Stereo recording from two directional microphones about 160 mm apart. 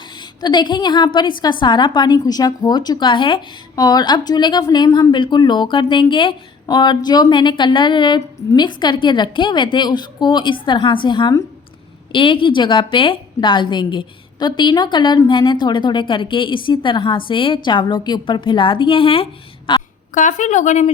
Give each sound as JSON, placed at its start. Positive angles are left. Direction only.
{"t": 0.2, "sound": "a woman's voice", "side_deg": 30}
{"t": 20.1, "sound": "a woman's voice", "side_deg": 50}